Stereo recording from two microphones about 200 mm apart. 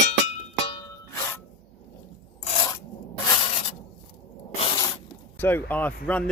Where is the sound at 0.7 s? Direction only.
15° left (ahead or behind).